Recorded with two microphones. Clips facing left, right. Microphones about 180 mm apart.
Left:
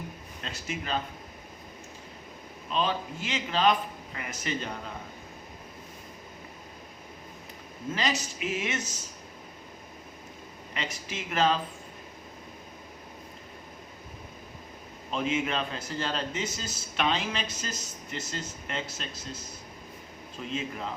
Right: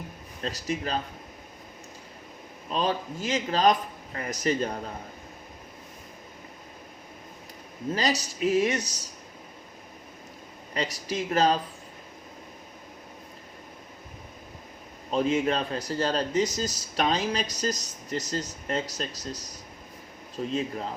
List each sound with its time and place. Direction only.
0.4 s a man's voice: 35° right (ahead or behind)
2.6 s a man's voice: 40° right (ahead or behind)
7.9 s a man's voice: 40° right (ahead or behind)
10.8 s a man's voice: 40° right (ahead or behind)
15.1 s a man's voice: 40° right (ahead or behind)